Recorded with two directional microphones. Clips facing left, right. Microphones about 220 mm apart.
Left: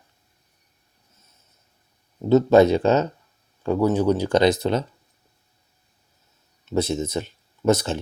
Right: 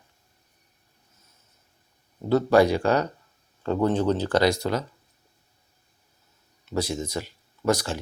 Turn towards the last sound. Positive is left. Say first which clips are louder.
# left 4 dB
turn(degrees=20)  # may be behind; listen again after turning